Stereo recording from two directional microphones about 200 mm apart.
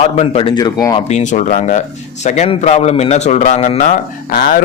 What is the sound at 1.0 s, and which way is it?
A man's voice, 35° left (ahead or behind).